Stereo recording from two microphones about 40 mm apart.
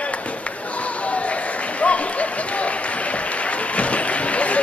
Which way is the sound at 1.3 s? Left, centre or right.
Left.